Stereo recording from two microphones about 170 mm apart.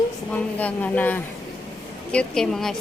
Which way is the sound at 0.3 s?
10° left (ahead or behind).